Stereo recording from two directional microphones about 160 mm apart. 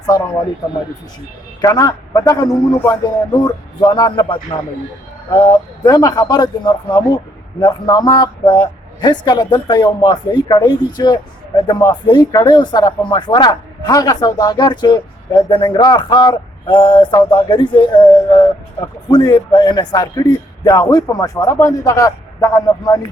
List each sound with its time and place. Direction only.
1.6 s a man's voice: 25° left (ahead or behind)